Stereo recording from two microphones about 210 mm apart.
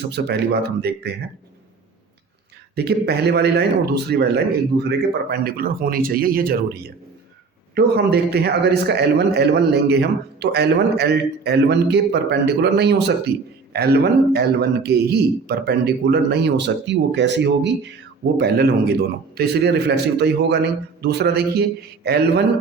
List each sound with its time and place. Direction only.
0.1 s a man's voice: 50° right (ahead or behind)
2.7 s a man's voice: 50° right (ahead or behind)